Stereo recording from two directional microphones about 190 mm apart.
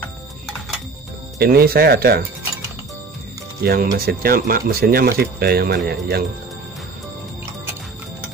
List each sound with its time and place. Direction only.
1.4 s speech: 55° right (ahead or behind)
3.6 s speech: 55° right (ahead or behind)